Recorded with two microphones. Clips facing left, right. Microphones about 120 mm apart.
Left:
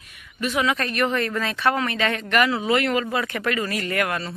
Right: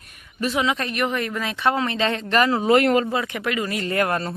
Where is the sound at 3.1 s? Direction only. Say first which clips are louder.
Even; 20° right (ahead or behind).